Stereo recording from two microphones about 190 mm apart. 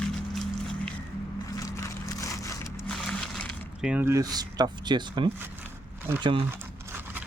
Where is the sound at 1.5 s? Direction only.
15° left (ahead or behind).